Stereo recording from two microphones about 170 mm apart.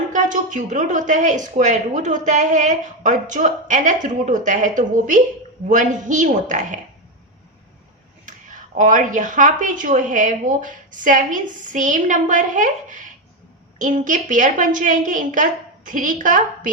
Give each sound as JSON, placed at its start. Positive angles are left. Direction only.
{"t": 0.1, "sound": "speech", "side_deg": -50}
{"t": 8.3, "sound": "speech", "side_deg": -50}